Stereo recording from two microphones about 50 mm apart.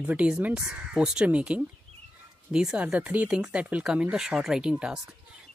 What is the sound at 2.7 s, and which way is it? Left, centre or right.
Speech, right.